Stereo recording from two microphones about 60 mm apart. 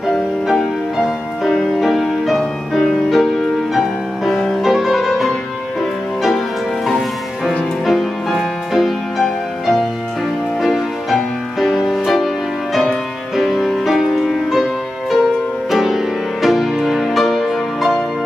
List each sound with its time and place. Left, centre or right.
0.5 s music: centre
7.4 s music: centre
13.4 s music: centre